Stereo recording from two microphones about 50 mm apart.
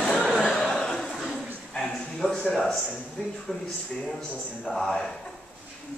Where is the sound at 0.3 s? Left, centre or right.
Centre.